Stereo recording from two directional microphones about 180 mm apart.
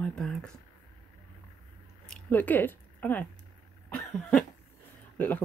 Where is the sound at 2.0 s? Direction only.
5° left (ahead or behind).